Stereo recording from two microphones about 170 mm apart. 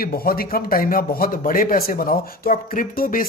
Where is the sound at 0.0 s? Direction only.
60° left (ahead or behind).